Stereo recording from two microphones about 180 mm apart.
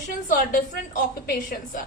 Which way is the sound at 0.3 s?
50° left (ahead or behind).